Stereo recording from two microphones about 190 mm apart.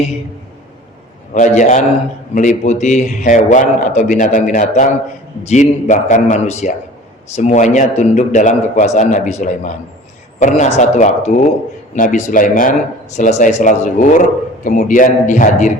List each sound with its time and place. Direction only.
1.3 s a man's voice: 40° left (ahead or behind)